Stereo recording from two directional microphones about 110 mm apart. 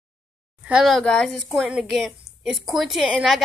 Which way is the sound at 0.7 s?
10° right (ahead or behind).